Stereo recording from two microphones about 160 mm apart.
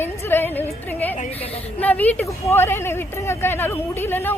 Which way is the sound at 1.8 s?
10° left (ahead or behind).